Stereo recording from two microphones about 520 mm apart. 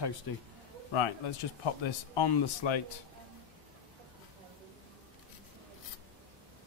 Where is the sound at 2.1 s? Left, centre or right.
Left.